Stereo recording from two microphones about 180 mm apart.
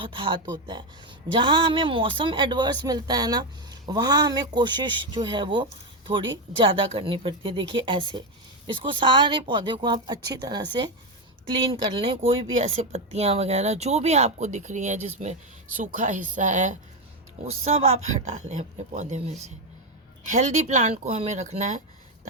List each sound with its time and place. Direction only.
0.0 s speech: 30° right (ahead or behind)
20.3 s speech: 40° right (ahead or behind)